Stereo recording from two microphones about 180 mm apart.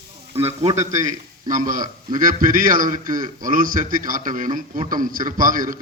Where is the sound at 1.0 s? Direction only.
45° right (ahead or behind).